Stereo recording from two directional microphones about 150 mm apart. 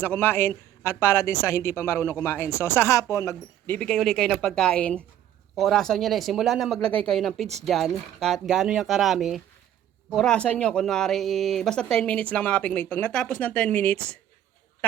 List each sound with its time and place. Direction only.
0.0 s speech: 15° left (ahead or behind)
3.8 s speech: 5° left (ahead or behind)